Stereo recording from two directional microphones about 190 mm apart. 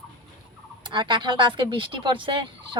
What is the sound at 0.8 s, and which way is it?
Speech, 25° right (ahead or behind).